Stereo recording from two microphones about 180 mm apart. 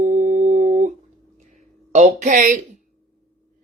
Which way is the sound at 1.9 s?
40° right (ahead or behind).